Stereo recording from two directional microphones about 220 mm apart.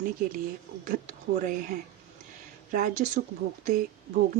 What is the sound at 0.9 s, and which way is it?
Speech, 35° right (ahead or behind).